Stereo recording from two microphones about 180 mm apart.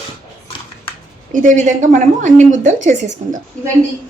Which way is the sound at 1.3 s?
45° right (ahead or behind).